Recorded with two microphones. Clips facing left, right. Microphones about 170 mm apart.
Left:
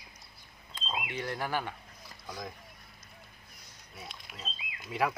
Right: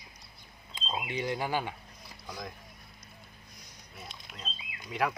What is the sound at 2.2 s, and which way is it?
Speech, 10° left (ahead or behind).